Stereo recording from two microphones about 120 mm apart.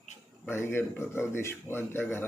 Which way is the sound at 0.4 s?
20° left (ahead or behind).